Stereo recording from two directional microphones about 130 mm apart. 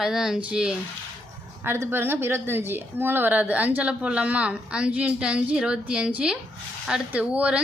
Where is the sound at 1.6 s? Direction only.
15° right (ahead or behind).